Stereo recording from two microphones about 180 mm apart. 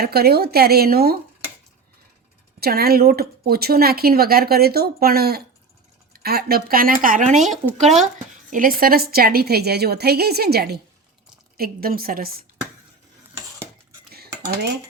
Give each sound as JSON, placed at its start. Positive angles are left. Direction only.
{"t": 0.0, "sound": "speech", "side_deg": -60}
{"t": 2.6, "sound": "speech", "side_deg": -60}
{"t": 14.1, "sound": "cutlery", "side_deg": -60}